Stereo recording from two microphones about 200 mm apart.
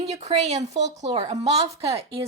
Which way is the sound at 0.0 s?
35° right (ahead or behind).